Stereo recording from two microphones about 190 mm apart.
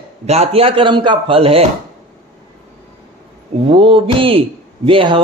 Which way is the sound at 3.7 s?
25° right (ahead or behind).